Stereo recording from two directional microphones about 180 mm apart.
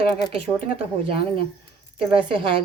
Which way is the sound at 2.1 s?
30° right (ahead or behind).